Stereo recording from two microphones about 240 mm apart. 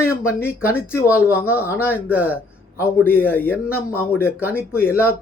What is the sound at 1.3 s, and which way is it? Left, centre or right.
Speech, centre.